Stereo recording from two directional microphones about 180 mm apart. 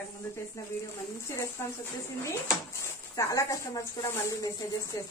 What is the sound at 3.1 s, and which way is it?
A woman's voice, 15° left (ahead or behind).